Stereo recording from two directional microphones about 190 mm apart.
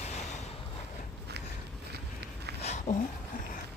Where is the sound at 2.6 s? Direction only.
35° left (ahead or behind).